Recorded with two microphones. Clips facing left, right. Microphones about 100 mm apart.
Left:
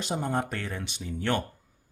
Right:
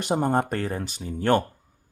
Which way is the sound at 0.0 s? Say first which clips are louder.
Right 6 dB; 55° right (ahead or behind).